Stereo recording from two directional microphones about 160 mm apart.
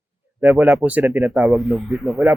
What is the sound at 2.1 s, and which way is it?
Speech, 15° right (ahead or behind).